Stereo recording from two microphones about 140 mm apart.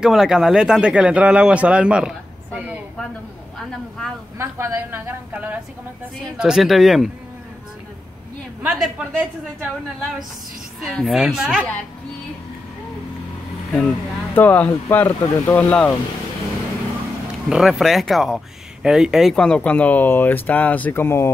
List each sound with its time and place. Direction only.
0.0 s a man's voice: 5° right (ahead or behind)
4.4 s a woman's voice: 20° right (ahead or behind); by 7.1 s centre (ahead or behind)
8.6 s a woman's voice: 5° right (ahead or behind)
10.8 s speech: centre (ahead or behind)
13.7 s speech: 10° left (ahead or behind)
17.5 s speech: 5° right (ahead or behind); by 21.3 s 15° left (ahead or behind)